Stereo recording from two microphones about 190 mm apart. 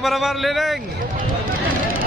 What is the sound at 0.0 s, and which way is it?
Speech, centre (ahead or behind).